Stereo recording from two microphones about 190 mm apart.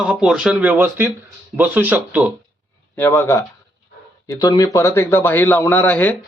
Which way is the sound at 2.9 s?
10° left (ahead or behind).